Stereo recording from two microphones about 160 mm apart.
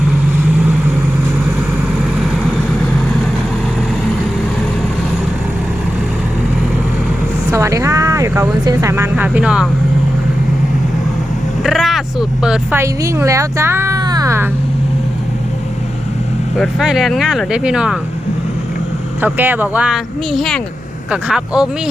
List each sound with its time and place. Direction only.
0.6 s vehicle: 5° right (ahead or behind)
7.5 s vehicle: 20° right (ahead or behind)
11.6 s vehicle: centre (ahead or behind)
12.7 s speech: 20° right (ahead or behind)
16.6 s speech: centre (ahead or behind)
19.2 s speech: 10° right (ahead or behind)